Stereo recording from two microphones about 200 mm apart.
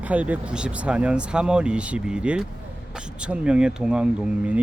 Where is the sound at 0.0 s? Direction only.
5° right (ahead or behind).